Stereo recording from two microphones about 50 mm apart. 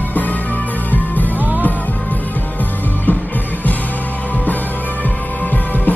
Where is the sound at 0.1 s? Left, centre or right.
Left.